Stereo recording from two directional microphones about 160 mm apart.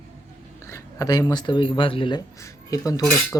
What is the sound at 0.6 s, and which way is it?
Speech, 20° left (ahead or behind).